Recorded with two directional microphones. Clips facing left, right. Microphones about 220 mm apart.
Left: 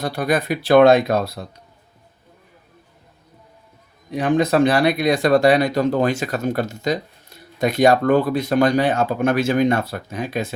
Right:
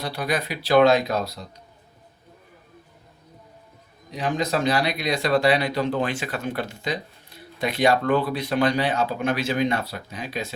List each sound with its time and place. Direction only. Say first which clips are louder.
0.0 s speech: left 6 dB; 45° left (ahead or behind)
4.1 s speech: left 7 dB; 55° left (ahead or behind)